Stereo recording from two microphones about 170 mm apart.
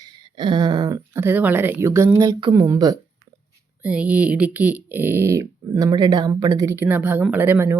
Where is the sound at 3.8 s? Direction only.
10° right (ahead or behind).